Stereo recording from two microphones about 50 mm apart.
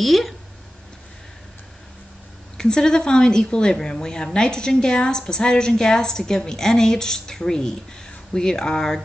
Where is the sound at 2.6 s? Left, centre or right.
Centre.